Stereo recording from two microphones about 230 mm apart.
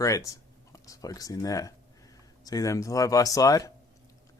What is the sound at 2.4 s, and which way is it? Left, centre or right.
Chopping, centre.